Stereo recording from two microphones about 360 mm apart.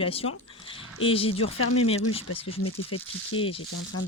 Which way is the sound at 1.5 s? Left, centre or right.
Left.